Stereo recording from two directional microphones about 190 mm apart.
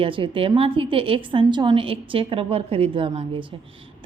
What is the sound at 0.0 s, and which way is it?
A woman's voice, 25° right (ahead or behind).